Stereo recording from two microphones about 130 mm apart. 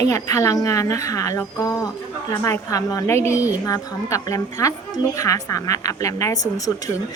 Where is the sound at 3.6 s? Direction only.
25° left (ahead or behind).